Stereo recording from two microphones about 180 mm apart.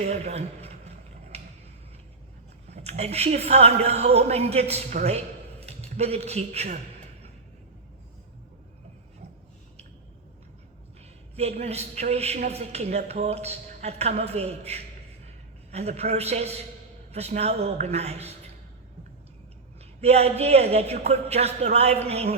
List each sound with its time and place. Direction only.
0.0 s a sound: 35° right (ahead or behind)
2.6 s a woman's voice: 35° right (ahead or behind)
11.3 s a woman's voice: 35° right (ahead or behind)
20.0 s a woman's voice: 35° right (ahead or behind)